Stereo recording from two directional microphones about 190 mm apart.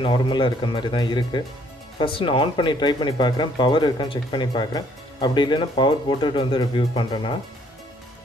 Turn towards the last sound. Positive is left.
turn(degrees=25)  # may be behind; listen again after turning